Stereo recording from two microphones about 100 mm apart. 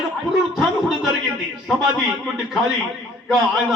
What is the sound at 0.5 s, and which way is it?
A man's voice, centre (ahead or behind).